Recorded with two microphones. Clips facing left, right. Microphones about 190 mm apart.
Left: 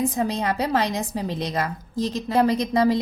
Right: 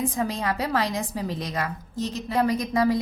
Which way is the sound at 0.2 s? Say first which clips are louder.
Left 3 dB; 20° left (ahead or behind).